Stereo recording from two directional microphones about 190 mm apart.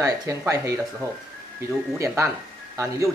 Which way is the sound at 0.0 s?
15° right (ahead or behind).